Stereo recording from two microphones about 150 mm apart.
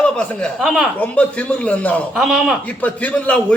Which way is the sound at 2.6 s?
10° left (ahead or behind).